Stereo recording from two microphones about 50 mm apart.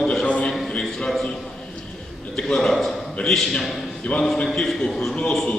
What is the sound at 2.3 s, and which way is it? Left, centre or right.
A man's voice, centre.